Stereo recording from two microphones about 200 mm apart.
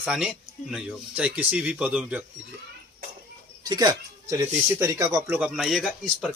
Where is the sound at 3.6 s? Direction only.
20° right (ahead or behind).